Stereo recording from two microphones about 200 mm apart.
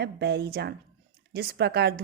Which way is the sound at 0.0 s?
60° right (ahead or behind).